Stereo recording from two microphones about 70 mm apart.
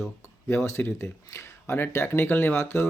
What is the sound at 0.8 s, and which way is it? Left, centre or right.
Speech, left.